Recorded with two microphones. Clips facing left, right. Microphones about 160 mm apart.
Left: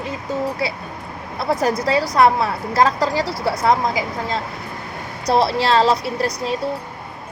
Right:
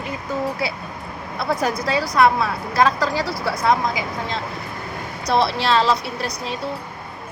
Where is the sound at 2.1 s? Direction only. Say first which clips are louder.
Even; 30° left (ahead or behind).